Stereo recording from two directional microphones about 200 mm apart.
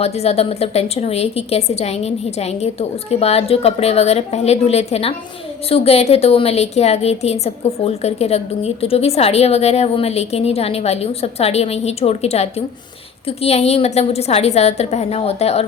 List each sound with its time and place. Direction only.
0.0 s a woman's voice: 30° left (ahead or behind)